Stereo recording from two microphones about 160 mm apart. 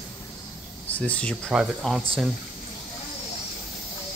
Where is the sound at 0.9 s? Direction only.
10° left (ahead or behind).